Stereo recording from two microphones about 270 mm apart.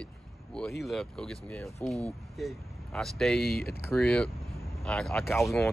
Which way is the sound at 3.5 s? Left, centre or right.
Left.